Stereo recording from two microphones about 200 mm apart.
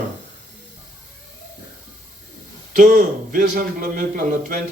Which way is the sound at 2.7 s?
40° right (ahead or behind).